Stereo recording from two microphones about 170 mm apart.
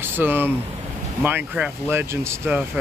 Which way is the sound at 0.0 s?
10° right (ahead or behind).